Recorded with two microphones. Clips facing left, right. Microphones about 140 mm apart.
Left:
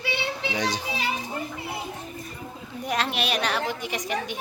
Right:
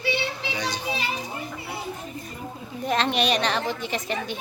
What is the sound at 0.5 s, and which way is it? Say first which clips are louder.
Speech: left 5 dB; 90° left.